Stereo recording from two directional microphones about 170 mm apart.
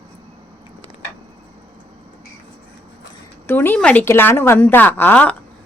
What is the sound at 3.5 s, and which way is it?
A woman's voice, 10° left (ahead or behind).